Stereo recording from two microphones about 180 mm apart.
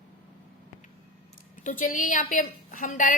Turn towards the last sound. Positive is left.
turn(degrees=45)  # may be behind; listen again after turning